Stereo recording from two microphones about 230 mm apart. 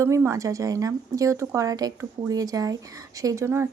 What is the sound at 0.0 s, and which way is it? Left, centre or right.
Speech, centre.